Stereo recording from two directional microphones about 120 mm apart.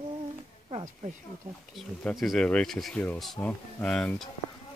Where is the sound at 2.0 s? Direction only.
5° left (ahead or behind).